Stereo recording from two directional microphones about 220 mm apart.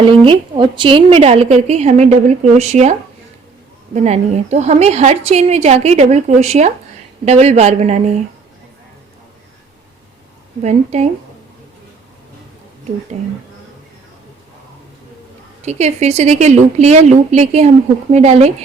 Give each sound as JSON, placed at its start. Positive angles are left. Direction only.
{"t": 0.1, "sound": "a woman's voice", "side_deg": -25}
{"t": 3.9, "sound": "a woman's voice", "side_deg": -30}
{"t": 10.6, "sound": "a woman's voice", "side_deg": -30}
{"t": 15.6, "sound": "a woman's voice", "side_deg": -30}